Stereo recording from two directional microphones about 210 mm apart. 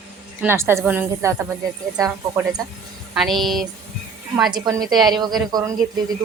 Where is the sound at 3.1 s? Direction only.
Centre (ahead or behind).